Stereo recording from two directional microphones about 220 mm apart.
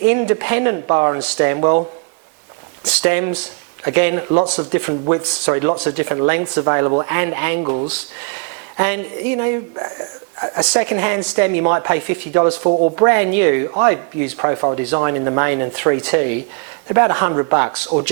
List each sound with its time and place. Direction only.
0.0 s speech: 10° right (ahead or behind)
2.8 s speech: 10° right (ahead or behind)
12.6 s speech: 35° right (ahead or behind)
13.0 s speech: 15° right (ahead or behind)
17.7 s speech: 30° right (ahead or behind)